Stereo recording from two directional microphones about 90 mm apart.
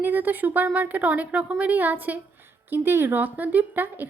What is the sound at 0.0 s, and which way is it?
A woman's voice, 20° right (ahead or behind).